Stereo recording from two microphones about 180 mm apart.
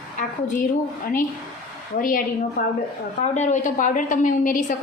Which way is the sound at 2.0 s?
50° left (ahead or behind).